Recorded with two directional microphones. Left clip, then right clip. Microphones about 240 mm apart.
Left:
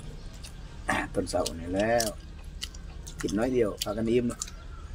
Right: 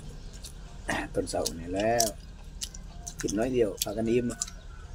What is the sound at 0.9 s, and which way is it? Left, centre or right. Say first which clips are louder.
Speech: left 2 dB; centre.